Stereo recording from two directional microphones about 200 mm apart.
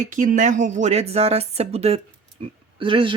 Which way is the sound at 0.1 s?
40° right (ahead or behind).